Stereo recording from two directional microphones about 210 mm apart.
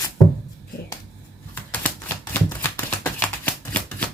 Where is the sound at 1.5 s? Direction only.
10° left (ahead or behind).